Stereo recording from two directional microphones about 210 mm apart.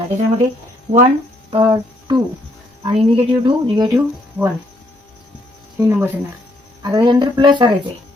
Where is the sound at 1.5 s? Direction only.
20° right (ahead or behind).